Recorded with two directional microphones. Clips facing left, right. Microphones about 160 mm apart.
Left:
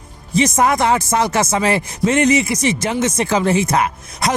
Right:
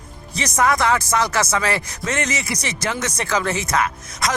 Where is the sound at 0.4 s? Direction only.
25° left (ahead or behind).